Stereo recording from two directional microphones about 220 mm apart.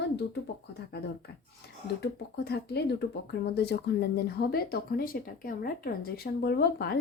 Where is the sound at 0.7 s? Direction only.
45° left (ahead or behind).